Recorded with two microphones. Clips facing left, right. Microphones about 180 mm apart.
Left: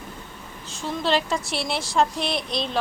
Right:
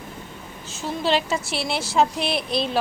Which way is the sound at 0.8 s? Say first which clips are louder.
Right 1 dB; centre (ahead or behind).